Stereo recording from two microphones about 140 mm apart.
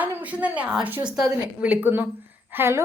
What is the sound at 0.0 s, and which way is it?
A woman's voice, 10° right (ahead or behind).